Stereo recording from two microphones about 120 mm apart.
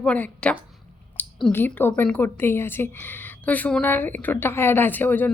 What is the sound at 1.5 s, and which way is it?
A woman's voice, 15° left (ahead or behind).